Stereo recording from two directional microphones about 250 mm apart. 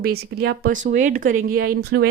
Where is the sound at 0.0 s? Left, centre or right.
Right.